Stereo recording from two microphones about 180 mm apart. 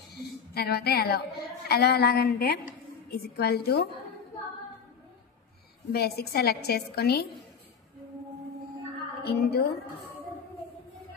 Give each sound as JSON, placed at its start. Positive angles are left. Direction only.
{"t": 0.1, "sound": "a woman's voice", "side_deg": 60}
{"t": 5.9, "sound": "a woman's voice", "side_deg": 60}
{"t": 9.2, "sound": "a woman's voice", "side_deg": 60}